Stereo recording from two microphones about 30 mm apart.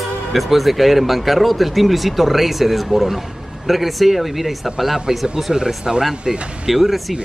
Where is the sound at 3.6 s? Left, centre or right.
Centre.